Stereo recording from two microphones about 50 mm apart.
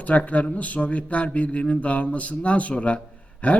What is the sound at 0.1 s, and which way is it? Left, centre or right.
A man's voice, left.